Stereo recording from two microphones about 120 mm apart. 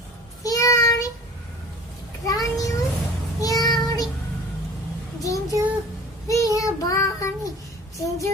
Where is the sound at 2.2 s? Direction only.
30° left (ahead or behind).